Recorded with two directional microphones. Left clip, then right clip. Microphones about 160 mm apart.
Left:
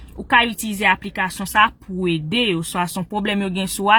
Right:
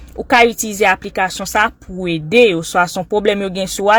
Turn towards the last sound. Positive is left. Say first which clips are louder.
# right 5 dB
turn(degrees=-15)  # may be behind; listen again after turning